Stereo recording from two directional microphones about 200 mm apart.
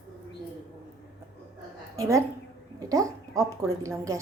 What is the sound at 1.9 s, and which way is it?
A woman's voice, 15° right (ahead or behind).